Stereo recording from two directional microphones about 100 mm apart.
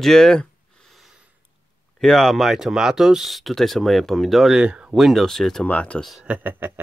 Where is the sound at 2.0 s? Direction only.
5° left (ahead or behind).